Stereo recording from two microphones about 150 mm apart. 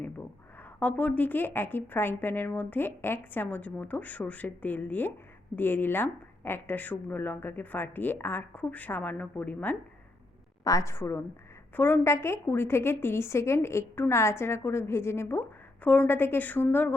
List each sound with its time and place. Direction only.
0.8 s a woman's voice: 10° left (ahead or behind)
10.6 s a woman's voice: 25° left (ahead or behind)